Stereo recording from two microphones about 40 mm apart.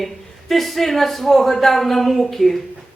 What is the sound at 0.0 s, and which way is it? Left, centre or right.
Speech, centre.